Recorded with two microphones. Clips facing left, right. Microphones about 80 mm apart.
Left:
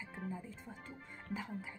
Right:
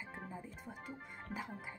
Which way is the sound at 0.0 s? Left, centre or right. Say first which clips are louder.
Left 2 dB; centre.